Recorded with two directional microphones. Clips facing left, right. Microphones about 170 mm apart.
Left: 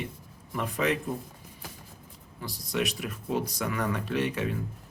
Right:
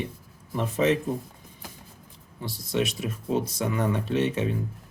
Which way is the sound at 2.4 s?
25° right (ahead or behind).